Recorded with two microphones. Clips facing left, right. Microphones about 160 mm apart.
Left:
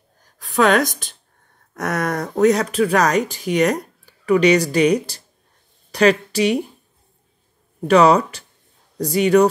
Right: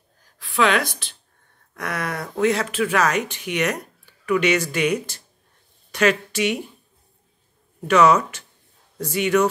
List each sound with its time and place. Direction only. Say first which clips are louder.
0.4 s a woman's voice: left 4 dB; 45° left (ahead or behind)
7.9 s speech: left 3 dB; 35° left (ahead or behind)